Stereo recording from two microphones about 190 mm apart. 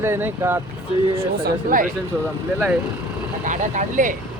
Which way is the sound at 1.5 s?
45° right (ahead or behind).